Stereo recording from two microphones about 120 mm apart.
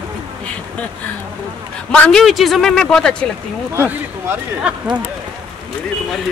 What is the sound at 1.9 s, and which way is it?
Speech, 10° left (ahead or behind).